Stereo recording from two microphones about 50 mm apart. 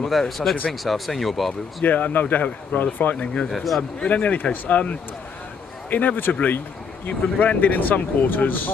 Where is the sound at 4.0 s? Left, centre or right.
Left.